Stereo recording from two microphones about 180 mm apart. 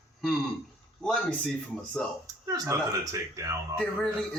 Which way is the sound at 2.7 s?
15° right (ahead or behind).